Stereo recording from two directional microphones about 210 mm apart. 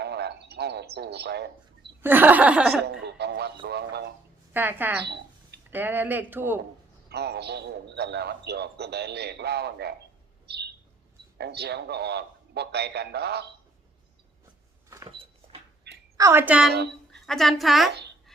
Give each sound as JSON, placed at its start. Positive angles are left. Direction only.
{"t": 0.0, "sound": "a sound", "side_deg": -50}
{"t": 2.0, "sound": "speech", "side_deg": -10}
{"t": 2.8, "sound": "speech", "side_deg": -50}
{"t": 4.5, "sound": "speech", "side_deg": -10}
{"t": 5.0, "sound": "a sound", "side_deg": -55}
{"t": 5.7, "sound": "speech", "side_deg": -10}
{"t": 7.1, "sound": "speech", "side_deg": -50}
{"t": 10.4, "sound": "bird", "side_deg": -50}
{"t": 11.3, "sound": "speech", "side_deg": -50}
{"t": 14.8, "sound": "a sound", "side_deg": -15}
{"t": 16.1, "sound": "speech", "side_deg": -15}